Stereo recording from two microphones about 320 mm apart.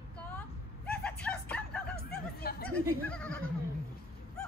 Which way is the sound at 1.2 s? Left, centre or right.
Centre.